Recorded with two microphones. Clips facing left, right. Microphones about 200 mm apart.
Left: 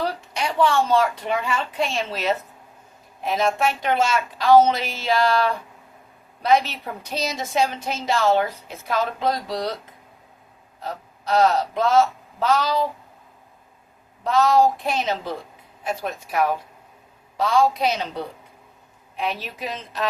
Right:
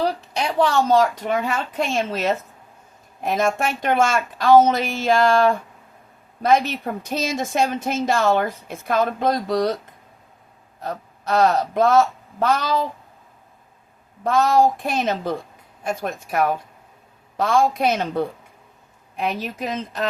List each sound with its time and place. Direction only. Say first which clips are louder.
0.0 s speech: right 3 dB; 40° right (ahead or behind)
10.8 s speech: right 3 dB; 50° right (ahead or behind)
14.3 s speech: right 1 dB; 50° right (ahead or behind)